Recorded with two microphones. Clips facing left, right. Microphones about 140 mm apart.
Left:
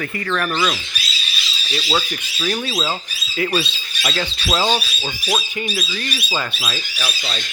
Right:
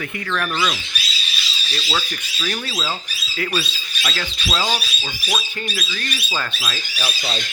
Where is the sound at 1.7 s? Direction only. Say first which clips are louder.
Left 4 dB; 20° left (ahead or behind).